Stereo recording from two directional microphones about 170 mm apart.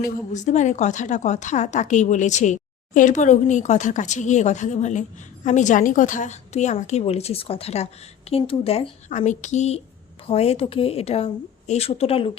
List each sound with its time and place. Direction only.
0.0 s a woman's voice: 45° left (ahead or behind)